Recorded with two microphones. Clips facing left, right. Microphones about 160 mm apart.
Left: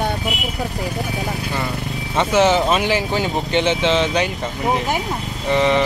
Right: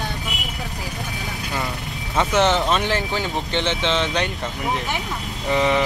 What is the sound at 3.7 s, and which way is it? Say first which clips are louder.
Speech: left 4 dB; centre (ahead or behind).